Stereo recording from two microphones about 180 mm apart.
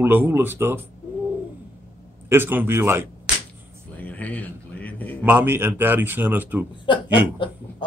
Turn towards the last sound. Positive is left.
turn(degrees=25)  # may be behind; listen again after turning